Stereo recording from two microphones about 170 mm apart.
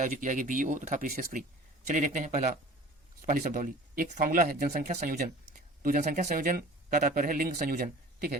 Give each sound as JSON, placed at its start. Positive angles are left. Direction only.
{"t": 0.0, "sound": "speech", "side_deg": -50}